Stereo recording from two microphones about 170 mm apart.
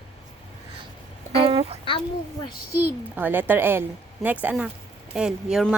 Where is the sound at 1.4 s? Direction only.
35° right (ahead or behind).